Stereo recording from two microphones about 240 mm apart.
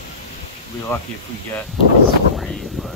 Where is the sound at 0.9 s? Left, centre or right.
Centre.